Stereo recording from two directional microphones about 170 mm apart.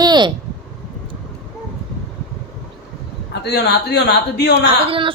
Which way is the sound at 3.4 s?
80° left.